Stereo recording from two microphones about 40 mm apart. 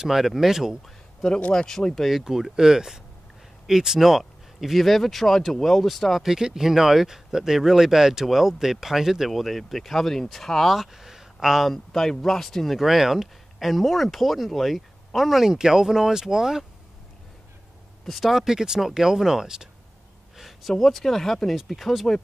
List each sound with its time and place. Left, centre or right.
0.0 s speech: centre
0.8 s a sound: centre
1.5 s speech: centre
2.0 s speech: centre
6.2 s speech: centre
9.3 s speech: centre
10.8 s a sound: centre
11.7 s speech: centre
12.7 s speech: centre
18.0 s speech: centre
20.3 s a sound: centre
20.7 s speech: centre